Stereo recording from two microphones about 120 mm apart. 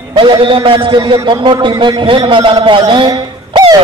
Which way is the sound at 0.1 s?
45° right (ahead or behind).